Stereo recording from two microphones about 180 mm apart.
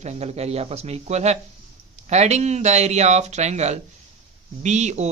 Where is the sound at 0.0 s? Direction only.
40° right (ahead or behind).